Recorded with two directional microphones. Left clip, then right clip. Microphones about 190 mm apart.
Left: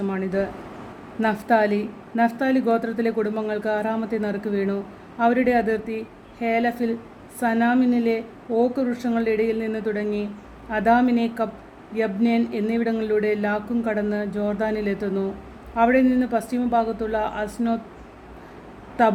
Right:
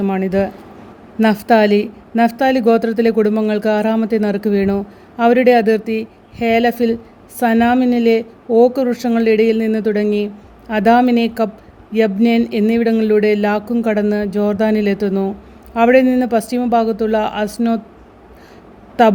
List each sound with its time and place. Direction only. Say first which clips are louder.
0.0 s speech: right 8 dB; 45° right (ahead or behind)
19.0 s speech: right 7 dB; 50° right (ahead or behind)